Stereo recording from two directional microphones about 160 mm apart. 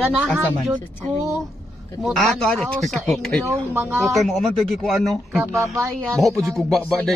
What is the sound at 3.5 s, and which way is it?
Speech, 15° right (ahead or behind).